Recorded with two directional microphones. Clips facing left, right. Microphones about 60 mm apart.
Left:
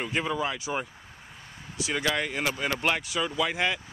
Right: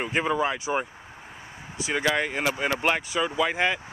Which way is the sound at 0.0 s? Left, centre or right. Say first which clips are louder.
Right 4 dB; right.